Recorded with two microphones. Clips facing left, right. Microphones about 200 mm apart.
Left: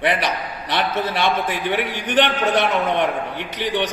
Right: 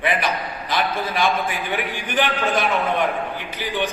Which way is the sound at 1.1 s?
80° left.